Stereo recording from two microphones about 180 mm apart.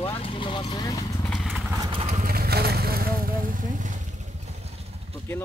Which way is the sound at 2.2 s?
60° right (ahead or behind).